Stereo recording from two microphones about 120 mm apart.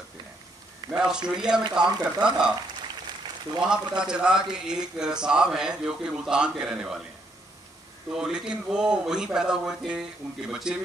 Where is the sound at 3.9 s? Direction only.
5° right (ahead or behind).